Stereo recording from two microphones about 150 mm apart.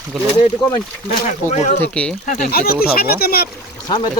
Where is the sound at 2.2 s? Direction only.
55° left (ahead or behind).